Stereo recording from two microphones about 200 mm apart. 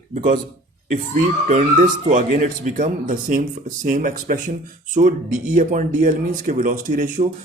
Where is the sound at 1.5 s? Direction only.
40° right (ahead or behind).